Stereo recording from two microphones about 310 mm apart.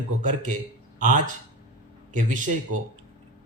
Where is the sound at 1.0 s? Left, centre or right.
Right.